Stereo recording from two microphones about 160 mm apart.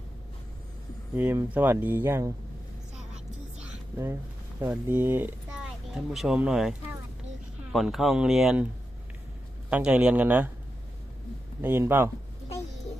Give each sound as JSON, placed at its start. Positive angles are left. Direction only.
{"t": 1.1, "sound": "speech", "side_deg": -15}
{"t": 3.9, "sound": "speech", "side_deg": -15}
{"t": 9.6, "sound": "speech", "side_deg": -5}
{"t": 11.6, "sound": "speech", "side_deg": -15}